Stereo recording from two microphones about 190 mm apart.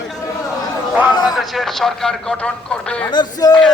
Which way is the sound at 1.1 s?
20° left (ahead or behind).